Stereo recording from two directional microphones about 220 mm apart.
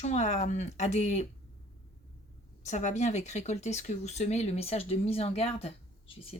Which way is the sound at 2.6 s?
30° left (ahead or behind).